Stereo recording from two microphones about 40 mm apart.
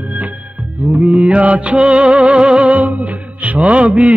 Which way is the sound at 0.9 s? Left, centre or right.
Right.